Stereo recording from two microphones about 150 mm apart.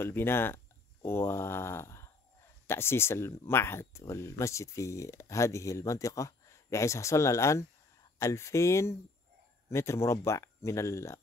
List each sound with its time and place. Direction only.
0.0 s speech: 15° left (ahead or behind)